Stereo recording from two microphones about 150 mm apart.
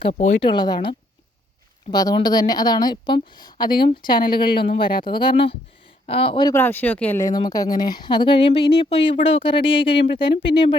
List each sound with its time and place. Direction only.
0.1 s speech: 50° left (ahead or behind)
0.4 s speech: 30° left (ahead or behind)
6.5 s speech: 15° left (ahead or behind); by 10.8 s 30° left (ahead or behind)